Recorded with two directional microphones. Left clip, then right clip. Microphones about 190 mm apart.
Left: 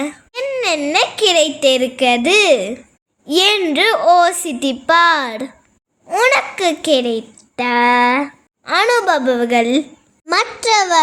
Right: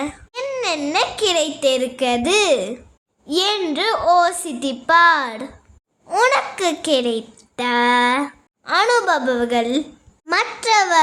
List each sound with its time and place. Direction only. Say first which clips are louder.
0.0 s a child's voice: left 4 dB; 25° left (ahead or behind)
10.2 s a child's voice: left 3 dB; 15° left (ahead or behind)